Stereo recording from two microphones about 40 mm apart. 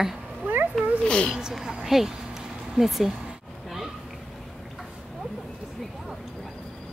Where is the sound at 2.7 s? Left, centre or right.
Centre.